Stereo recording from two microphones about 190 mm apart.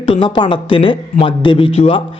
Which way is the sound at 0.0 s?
25° left (ahead or behind).